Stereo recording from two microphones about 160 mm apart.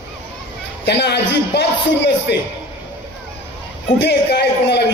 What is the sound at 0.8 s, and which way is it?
A man's voice, 90° left.